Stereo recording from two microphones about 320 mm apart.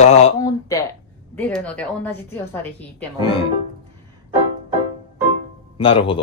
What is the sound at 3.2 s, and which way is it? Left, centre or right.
Speech, centre.